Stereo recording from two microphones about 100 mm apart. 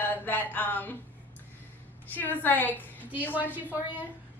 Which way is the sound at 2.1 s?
20° left (ahead or behind).